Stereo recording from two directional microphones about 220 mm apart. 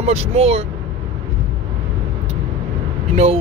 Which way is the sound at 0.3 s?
25° right (ahead or behind).